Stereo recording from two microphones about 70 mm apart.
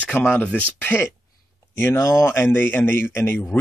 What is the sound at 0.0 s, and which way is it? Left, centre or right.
Speech, centre.